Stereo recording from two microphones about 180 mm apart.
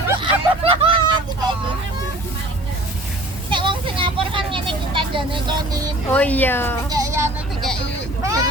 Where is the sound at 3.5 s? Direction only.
25° right (ahead or behind).